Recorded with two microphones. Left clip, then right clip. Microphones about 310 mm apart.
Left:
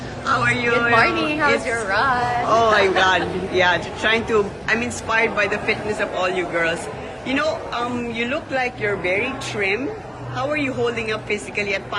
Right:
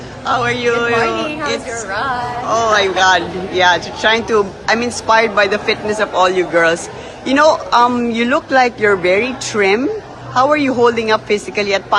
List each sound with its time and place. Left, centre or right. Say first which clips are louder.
0.3 s a man's voice: right 4 dB; centre